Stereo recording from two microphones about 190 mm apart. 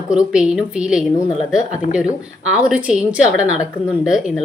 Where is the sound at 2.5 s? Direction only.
5° right (ahead or behind).